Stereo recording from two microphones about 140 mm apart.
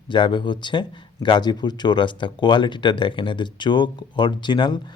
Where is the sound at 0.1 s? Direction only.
35° left (ahead or behind).